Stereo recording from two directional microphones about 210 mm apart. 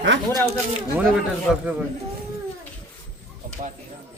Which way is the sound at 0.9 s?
5° right (ahead or behind).